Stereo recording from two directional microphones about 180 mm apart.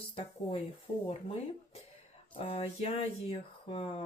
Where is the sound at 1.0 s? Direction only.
30° left (ahead or behind).